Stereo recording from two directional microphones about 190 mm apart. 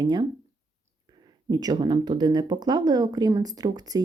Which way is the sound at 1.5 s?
20° right (ahead or behind).